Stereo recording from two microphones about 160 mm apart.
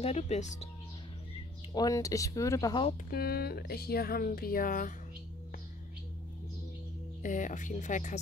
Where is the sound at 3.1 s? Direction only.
75° left (ahead or behind); by 4.9 s 60° left (ahead or behind).